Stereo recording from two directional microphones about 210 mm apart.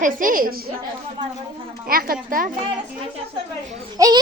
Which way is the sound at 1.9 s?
45° right (ahead or behind).